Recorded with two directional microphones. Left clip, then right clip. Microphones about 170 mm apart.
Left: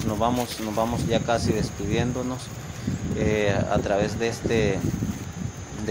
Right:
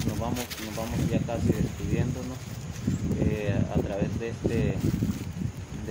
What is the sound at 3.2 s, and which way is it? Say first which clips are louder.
Speech: left 10 dB; 25° left (ahead or behind).